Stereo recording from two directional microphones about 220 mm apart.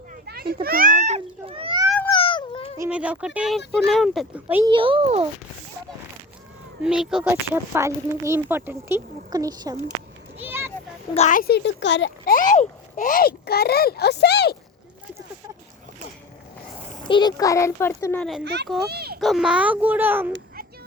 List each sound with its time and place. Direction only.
0.3 s children playing: 45° right (ahead or behind); by 1.8 s 25° right (ahead or behind)
2.2 s a sound: 25° left (ahead or behind)
2.7 s speech: 10° right (ahead or behind)
4.7 s a child's voice: 25° right (ahead or behind)
6.8 s speech: centre (ahead or behind)
7.3 s speech: 10° right (ahead or behind)
10.4 s children playing: 10° right (ahead or behind)
11.1 s a child's voice: 35° left (ahead or behind); by 12.1 s 55° left (ahead or behind)
12.2 s a child's voice: 40° left (ahead or behind)
17.1 s a child's voice: 20° left (ahead or behind)
18.4 s a child's voice: 50° right (ahead or behind)
18.9 s a sound: 45° right (ahead or behind)
19.2 s speech: centre (ahead or behind)